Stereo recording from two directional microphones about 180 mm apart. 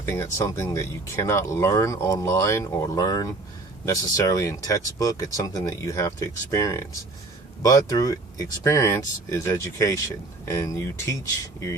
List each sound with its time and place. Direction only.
0.1 s speech: 15° left (ahead or behind)